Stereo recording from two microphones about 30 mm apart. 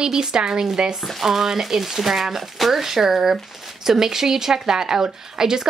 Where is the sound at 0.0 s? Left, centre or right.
Right.